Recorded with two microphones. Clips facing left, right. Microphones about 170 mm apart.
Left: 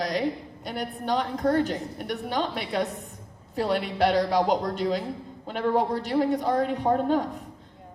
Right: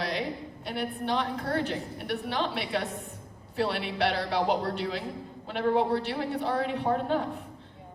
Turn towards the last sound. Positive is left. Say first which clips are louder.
# left 4 dB
turn(degrees=40)  # may be behind; listen again after turning